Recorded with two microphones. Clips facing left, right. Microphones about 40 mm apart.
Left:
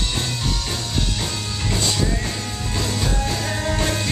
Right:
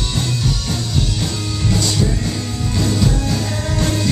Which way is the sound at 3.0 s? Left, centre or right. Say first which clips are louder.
Right 4 dB; centre.